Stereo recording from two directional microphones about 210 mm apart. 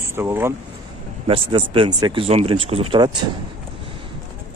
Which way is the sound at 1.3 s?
25° right (ahead or behind).